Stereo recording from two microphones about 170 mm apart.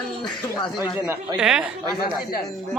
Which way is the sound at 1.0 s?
5° right (ahead or behind).